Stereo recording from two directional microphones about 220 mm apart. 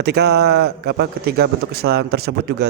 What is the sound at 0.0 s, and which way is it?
A man's voice, 50° right (ahead or behind).